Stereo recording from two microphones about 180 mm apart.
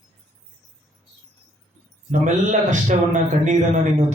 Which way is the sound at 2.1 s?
45° right (ahead or behind).